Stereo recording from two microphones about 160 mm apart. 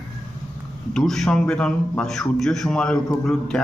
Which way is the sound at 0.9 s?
Centre (ahead or behind).